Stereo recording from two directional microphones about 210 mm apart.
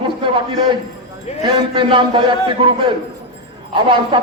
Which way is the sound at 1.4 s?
20° right (ahead or behind).